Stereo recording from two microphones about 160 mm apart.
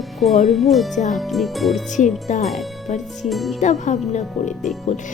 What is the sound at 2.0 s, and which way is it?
Speech, 50° left (ahead or behind).